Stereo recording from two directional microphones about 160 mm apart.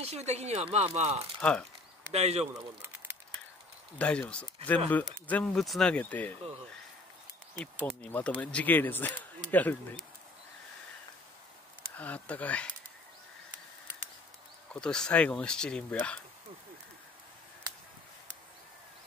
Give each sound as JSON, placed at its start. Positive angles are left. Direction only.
{"t": 0.0, "sound": "speech", "side_deg": -45}
{"t": 1.4, "sound": "speech", "side_deg": 5}
{"t": 2.1, "sound": "speech", "side_deg": -40}
{"t": 2.8, "sound": "crumpling", "side_deg": -10}
{"t": 4.0, "sound": "speech", "side_deg": 5}
{"t": 8.0, "sound": "speech", "side_deg": 10}
{"t": 12.0, "sound": "speech", "side_deg": 10}
{"t": 14.7, "sound": "speech", "side_deg": 5}